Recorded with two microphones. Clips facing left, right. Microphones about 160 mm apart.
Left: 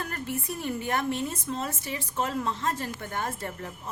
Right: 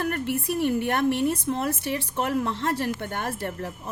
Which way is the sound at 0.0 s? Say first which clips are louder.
Right 7 dB; 65° right (ahead or behind).